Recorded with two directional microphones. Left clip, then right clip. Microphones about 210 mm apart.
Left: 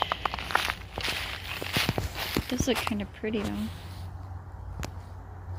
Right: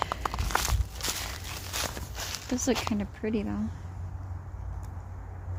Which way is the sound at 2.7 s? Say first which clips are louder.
Left 1 dB; 5° right (ahead or behind).